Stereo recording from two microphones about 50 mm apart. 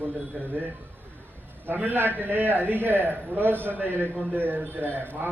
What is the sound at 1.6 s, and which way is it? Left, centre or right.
A man's voice, right.